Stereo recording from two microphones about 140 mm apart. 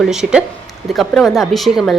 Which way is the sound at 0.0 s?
5° right (ahead or behind).